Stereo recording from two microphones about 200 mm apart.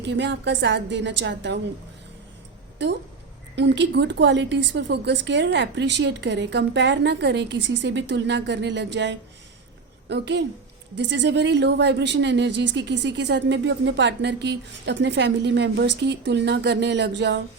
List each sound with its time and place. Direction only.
0.0 s a woman's voice: 60° right (ahead or behind)
3.5 s a woman's voice: 60° right (ahead or behind)